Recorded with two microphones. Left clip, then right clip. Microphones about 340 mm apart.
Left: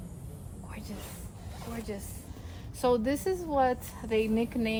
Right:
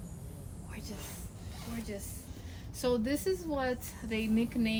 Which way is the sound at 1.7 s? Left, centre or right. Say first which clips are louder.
Left 3 dB; centre.